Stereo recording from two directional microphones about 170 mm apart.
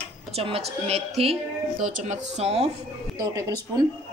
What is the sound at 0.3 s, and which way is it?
A woman's voice, 35° right (ahead or behind).